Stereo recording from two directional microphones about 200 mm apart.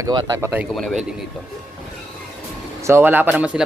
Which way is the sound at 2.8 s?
10° right (ahead or behind).